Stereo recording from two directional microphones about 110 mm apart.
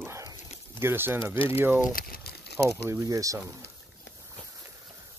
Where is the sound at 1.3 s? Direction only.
60° left (ahead or behind).